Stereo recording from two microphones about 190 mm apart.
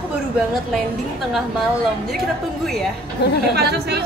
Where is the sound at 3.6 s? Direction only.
55° right (ahead or behind).